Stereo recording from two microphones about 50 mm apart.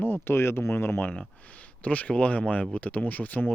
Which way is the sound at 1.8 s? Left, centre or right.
Left.